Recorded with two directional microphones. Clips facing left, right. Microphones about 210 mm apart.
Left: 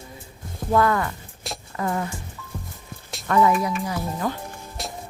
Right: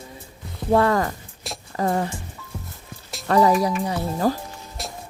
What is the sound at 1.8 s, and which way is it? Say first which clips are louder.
Speech: right 4 dB; 35° right (ahead or behind).